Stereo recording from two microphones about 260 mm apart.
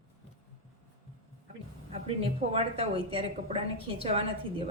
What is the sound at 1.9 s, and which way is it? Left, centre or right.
A woman's voice, right.